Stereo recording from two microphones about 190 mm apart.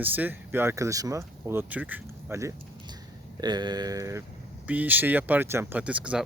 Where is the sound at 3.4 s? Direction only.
20° right (ahead or behind).